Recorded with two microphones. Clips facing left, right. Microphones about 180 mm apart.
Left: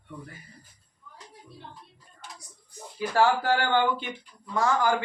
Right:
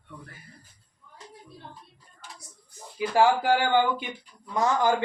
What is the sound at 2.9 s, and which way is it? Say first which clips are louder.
A man's voice: right 2 dB; 15° right (ahead or behind).